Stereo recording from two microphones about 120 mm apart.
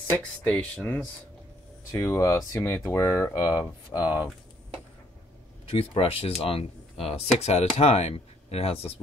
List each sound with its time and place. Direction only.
0.2 s speech: 15° left (ahead or behind)
3.9 s speech: 15° left (ahead or behind)
5.7 s speech: 50° left (ahead or behind)